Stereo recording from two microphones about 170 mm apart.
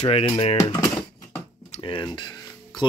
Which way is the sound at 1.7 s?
30° left (ahead or behind).